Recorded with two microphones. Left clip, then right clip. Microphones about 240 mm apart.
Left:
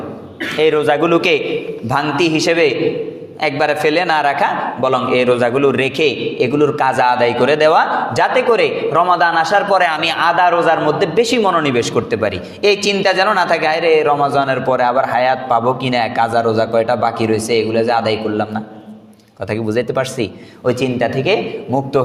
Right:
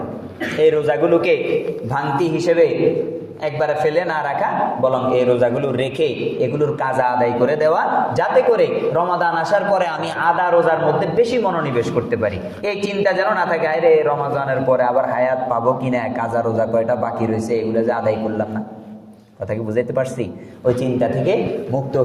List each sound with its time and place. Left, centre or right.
0.6 s a man's voice: left
19.6 s a man's voice: left